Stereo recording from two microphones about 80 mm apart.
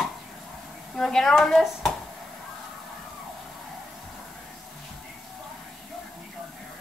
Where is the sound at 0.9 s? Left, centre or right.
Centre.